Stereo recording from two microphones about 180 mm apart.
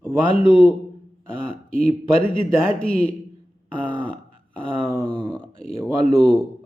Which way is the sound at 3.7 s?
5° left (ahead or behind).